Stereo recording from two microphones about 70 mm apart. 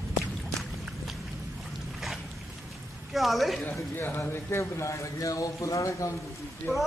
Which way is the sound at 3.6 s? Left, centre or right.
Left.